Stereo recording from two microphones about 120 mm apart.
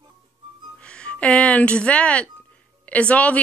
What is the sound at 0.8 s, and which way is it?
A woman's voice, 10° left (ahead or behind).